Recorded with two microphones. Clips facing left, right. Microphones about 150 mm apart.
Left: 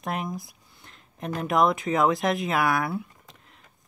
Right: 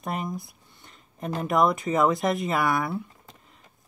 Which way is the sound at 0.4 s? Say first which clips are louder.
Even; centre (ahead or behind).